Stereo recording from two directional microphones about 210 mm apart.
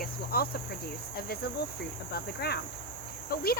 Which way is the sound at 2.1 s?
50° left (ahead or behind).